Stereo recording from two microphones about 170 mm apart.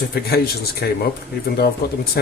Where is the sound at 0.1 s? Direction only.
65° left (ahead or behind).